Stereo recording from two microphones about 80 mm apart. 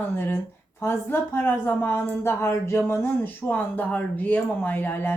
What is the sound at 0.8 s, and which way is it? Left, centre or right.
A woman's voice, left.